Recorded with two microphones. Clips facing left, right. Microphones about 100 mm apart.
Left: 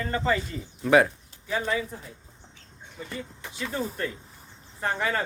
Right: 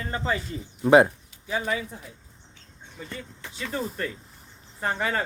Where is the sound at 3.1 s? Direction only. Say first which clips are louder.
Left 2 dB; 15° left (ahead or behind).